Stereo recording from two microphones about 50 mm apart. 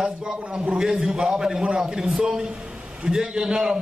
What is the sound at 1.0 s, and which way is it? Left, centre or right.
A man's voice, centre.